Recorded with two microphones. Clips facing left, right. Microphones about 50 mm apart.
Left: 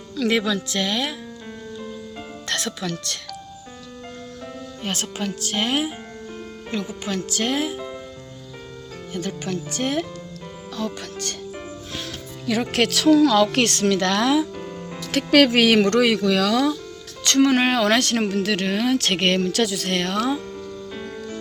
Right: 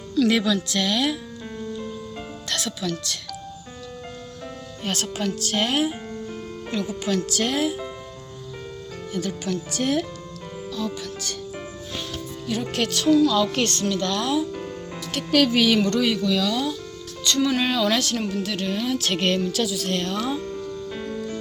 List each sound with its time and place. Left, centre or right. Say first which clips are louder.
0.2 s speech: right 1 dB; left
2.5 s speech: left 1 dB; left
4.8 s speech: right 1 dB; left
6.7 s speech: right 2 dB; left
9.1 s speech: even; left
10.8 s speech: left 2 dB; left
12.7 s a woman's voice: left 3 dB; left
14.5 s music: even; centre
15.1 s a woman's voice: left 4 dB; left
17.2 s speech: left 4 dB; left
20.9 s music: right 1 dB; centre